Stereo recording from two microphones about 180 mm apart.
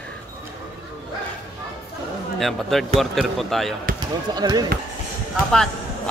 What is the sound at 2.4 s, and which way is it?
Speech, centre (ahead or behind).